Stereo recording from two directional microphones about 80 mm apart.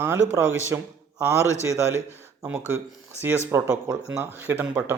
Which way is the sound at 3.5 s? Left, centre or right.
Right.